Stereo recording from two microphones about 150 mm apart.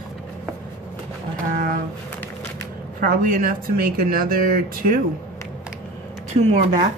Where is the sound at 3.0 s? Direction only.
75° right (ahead or behind).